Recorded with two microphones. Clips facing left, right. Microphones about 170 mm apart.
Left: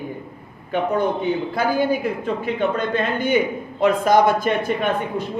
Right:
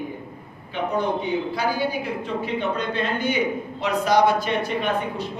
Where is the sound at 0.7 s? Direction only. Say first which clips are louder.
Left 4 dB; 50° left (ahead or behind).